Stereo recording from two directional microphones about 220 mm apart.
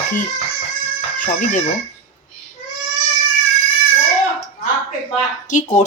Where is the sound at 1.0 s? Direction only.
35° left (ahead or behind).